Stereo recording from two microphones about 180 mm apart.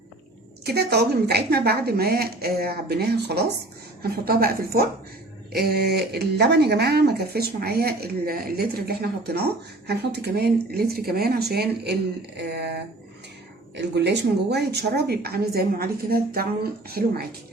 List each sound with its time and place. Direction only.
0.6 s speech: 65° right (ahead or behind)
12.4 s a sound: 65° right (ahead or behind)
13.7 s speech: 70° right (ahead or behind)